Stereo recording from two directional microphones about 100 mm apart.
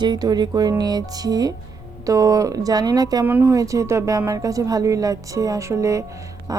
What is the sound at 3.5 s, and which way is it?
A woman's voice, 35° right (ahead or behind).